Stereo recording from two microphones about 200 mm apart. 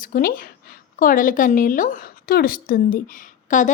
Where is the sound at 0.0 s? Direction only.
45° left (ahead or behind).